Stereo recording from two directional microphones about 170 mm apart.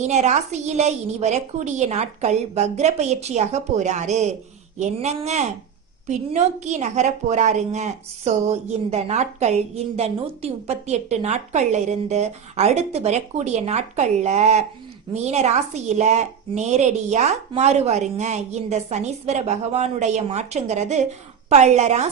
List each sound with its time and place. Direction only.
0.0 s a woman's voice: 45° right (ahead or behind)